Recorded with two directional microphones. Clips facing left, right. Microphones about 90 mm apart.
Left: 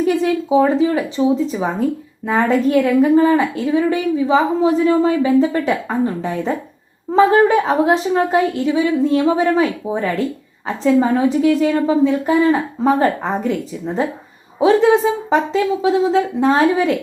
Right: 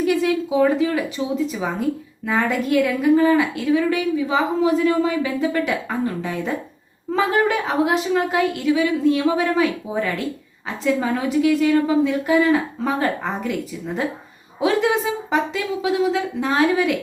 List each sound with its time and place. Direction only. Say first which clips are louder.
0.0 s a woman's voice: left 3 dB; 35° left (ahead or behind)